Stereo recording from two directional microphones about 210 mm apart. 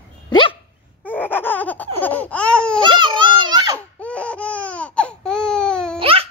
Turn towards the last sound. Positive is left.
turn(degrees=-25)  # may be behind; listen again after turning